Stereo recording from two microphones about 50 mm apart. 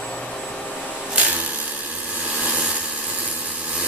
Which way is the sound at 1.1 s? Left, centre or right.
Right.